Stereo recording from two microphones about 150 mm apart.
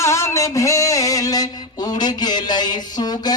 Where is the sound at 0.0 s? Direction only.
20° left (ahead or behind).